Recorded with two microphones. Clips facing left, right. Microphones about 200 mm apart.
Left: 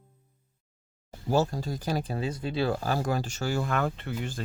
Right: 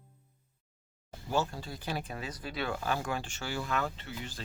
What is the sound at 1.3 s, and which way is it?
Speech, 40° left (ahead or behind).